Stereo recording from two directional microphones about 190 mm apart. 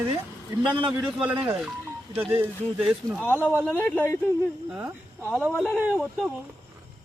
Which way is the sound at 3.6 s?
10° left (ahead or behind).